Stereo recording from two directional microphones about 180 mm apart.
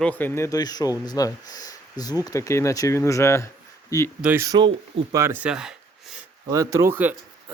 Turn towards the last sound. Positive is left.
turn(degrees=-10)  # may be behind; listen again after turning